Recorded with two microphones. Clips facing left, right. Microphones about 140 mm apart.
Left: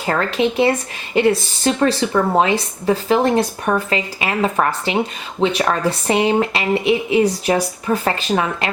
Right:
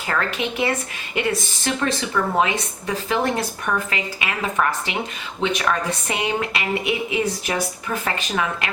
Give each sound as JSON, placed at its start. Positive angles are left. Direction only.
{"t": 0.0, "sound": "a woman's voice", "side_deg": 30}